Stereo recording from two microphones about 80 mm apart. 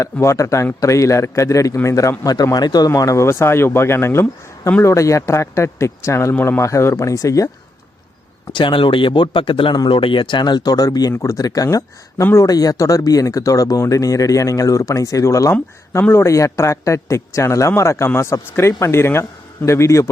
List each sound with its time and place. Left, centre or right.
0.0 s speech: left
2.9 s speech: left
8.5 s speech: left
11.1 s speech: left
12.5 s speech: left